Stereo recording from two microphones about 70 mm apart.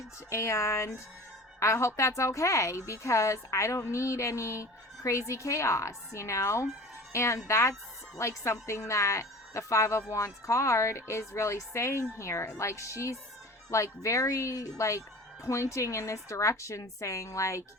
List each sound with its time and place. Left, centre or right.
0.3 s a woman's voice: left